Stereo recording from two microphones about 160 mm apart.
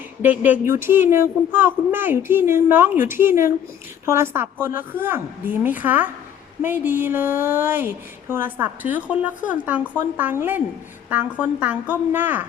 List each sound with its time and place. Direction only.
0.2 s speech: 10° right (ahead or behind)